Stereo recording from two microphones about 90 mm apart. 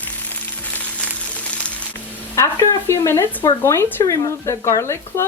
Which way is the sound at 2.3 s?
35° left (ahead or behind).